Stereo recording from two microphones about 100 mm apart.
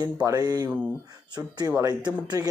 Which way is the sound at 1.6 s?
30° right (ahead or behind).